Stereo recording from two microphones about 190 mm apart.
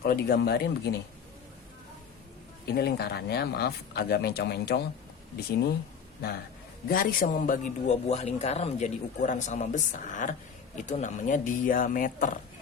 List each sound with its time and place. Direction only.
0.0 s speech: 55° left (ahead or behind)
2.6 s speech: 55° left (ahead or behind)
6.8 s a man's voice: 50° left (ahead or behind)